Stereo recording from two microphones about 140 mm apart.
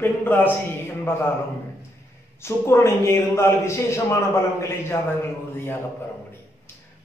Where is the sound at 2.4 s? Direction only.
20° left (ahead or behind).